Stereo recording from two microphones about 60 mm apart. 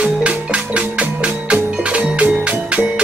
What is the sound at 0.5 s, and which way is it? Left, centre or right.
Music, right.